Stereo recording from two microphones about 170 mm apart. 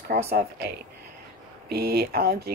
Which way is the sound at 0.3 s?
70° right (ahead or behind).